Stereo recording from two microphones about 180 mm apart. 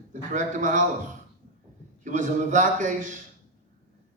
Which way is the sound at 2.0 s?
45° right (ahead or behind).